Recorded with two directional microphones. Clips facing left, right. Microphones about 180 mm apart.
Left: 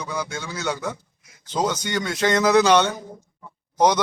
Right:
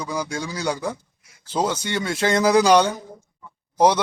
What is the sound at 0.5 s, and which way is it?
Speech, 35° right (ahead or behind).